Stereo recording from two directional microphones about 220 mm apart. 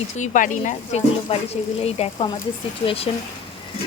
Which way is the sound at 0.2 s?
35° left (ahead or behind).